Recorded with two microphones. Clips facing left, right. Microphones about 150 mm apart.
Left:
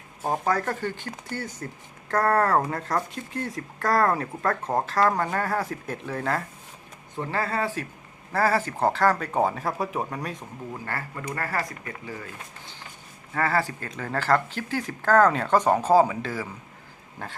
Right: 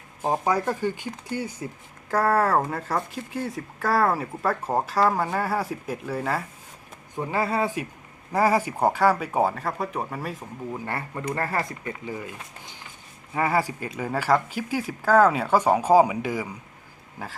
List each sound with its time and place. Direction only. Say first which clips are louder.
0.2 s speech: right 2 dB; 15° right (ahead or behind)
10.8 s speech: right 3 dB; 20° right (ahead or behind)